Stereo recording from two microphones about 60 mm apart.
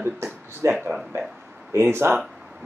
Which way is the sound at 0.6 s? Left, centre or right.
Right.